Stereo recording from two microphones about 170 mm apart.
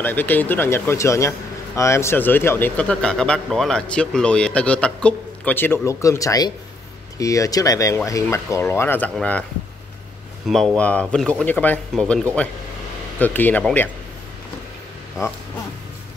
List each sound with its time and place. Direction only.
0.0 s speech: 10° left (ahead or behind)
10.4 s speech: centre (ahead or behind)